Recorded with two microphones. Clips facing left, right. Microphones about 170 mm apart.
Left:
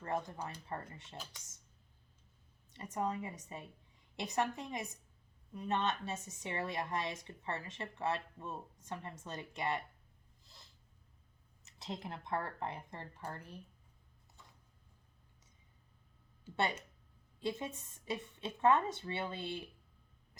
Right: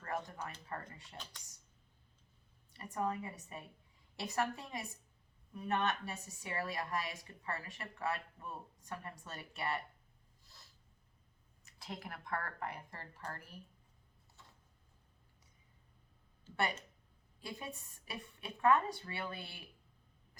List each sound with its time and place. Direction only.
0.7 s a woman's voice: 20° left (ahead or behind)
1.1 s speech: 5° left (ahead or behind)
2.7 s a woman's voice: 20° left (ahead or behind)
11.6 s a woman's voice: 25° left (ahead or behind)
16.5 s a sound: 10° left (ahead or behind)
17.4 s a woman's voice: 20° left (ahead or behind)